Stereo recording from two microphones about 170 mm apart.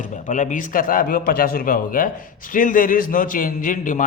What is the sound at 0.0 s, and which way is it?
A man's voice, 50° left (ahead or behind).